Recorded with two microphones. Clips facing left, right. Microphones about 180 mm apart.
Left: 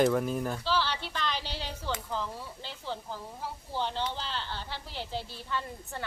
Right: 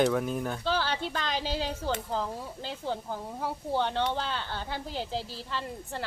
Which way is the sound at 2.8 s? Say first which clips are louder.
Right 4 dB; 55° right (ahead or behind).